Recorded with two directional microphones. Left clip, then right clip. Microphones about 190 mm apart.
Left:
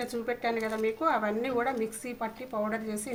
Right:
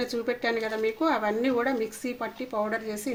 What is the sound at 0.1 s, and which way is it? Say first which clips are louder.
Speech: right 3 dB; 35° right (ahead or behind).